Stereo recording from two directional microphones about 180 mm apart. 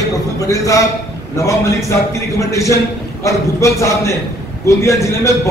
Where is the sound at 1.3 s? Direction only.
15° left (ahead or behind).